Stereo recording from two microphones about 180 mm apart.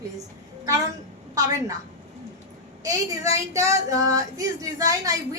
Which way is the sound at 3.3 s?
15° right (ahead or behind).